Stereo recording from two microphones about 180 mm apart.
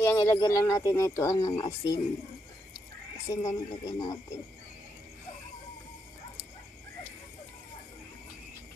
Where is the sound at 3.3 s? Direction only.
20° left (ahead or behind).